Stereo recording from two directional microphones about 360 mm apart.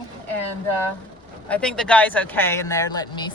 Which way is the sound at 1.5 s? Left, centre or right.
Centre.